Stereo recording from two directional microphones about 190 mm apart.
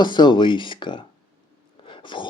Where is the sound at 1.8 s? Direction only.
25° left (ahead or behind).